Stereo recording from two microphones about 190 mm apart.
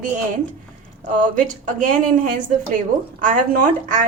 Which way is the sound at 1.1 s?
45° right (ahead or behind).